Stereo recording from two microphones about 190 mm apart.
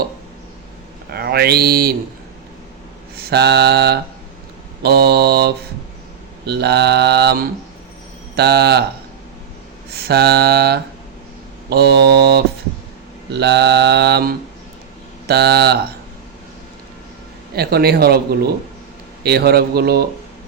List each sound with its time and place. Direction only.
1.1 s mantra: 55° right (ahead or behind)
3.2 s mantra: 60° right (ahead or behind)
9.9 s mantra: 55° right (ahead or behind)
17.5 s mantra: 55° right (ahead or behind)
19.2 s mantra: 55° right (ahead or behind)